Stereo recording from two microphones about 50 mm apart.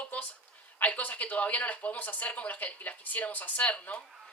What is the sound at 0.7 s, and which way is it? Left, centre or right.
Speech, left.